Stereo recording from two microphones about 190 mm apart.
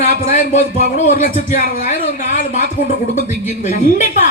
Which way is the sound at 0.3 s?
40° left (ahead or behind).